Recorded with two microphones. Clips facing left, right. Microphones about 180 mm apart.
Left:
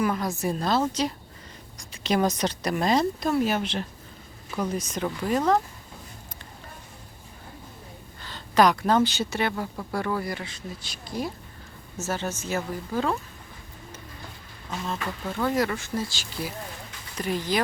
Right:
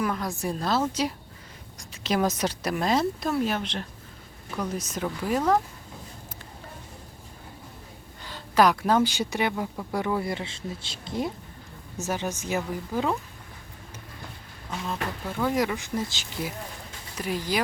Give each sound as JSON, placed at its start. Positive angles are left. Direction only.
{"t": 0.0, "sound": "speech", "side_deg": 0}
{"t": 8.2, "sound": "a woman's voice", "side_deg": -10}
{"t": 15.3, "sound": "a woman's voice", "side_deg": -10}
{"t": 17.2, "sound": "a woman's voice", "side_deg": -10}